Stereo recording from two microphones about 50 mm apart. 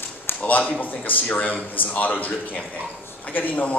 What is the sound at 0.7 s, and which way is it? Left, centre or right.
A man's voice, left.